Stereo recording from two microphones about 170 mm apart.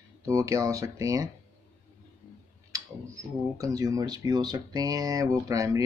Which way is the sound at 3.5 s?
20° right (ahead or behind).